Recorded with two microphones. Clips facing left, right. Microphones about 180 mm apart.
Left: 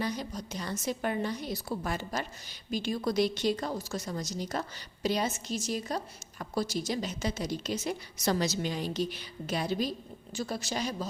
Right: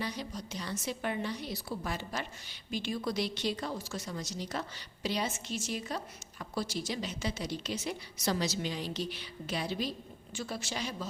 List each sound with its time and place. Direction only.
0.0 s a woman's voice: 45° left (ahead or behind)